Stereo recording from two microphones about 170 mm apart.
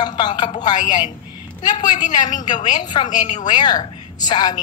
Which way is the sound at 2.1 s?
25° left (ahead or behind).